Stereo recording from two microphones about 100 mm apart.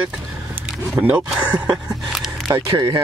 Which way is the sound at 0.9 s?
10° right (ahead or behind).